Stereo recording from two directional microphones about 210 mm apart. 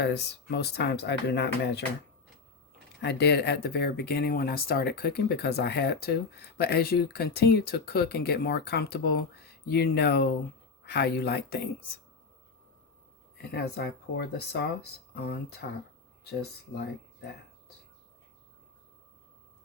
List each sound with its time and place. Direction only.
0.0 s speech: 55° left (ahead or behind)
3.0 s speech: 55° left (ahead or behind)
13.4 s speech: 50° left (ahead or behind)
16.7 s speech: 55° left (ahead or behind)